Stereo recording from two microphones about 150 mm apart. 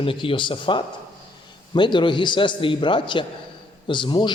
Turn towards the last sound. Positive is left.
turn(degrees=30)  # may be behind; listen again after turning